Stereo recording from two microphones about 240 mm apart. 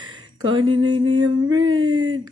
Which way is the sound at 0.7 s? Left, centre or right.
Right.